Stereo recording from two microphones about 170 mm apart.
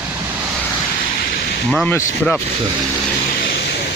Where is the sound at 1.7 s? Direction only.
10° left (ahead or behind).